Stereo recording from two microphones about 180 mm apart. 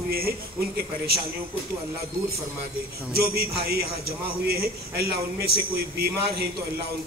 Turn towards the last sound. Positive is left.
turn(degrees=-60)  # may be behind; listen again after turning